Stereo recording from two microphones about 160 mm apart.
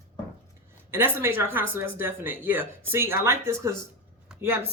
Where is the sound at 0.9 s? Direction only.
15° right (ahead or behind).